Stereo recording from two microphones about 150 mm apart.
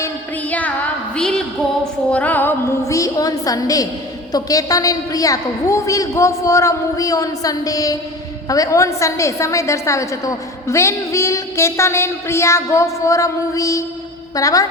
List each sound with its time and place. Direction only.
1.1 s a woman's voice: 5° left (ahead or behind); by 14.7 s 20° left (ahead or behind)